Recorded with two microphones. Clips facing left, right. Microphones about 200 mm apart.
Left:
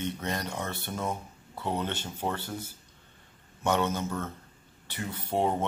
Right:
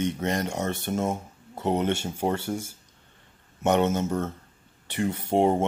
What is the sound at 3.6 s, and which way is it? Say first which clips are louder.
Speech: right 5 dB; 20° right (ahead or behind).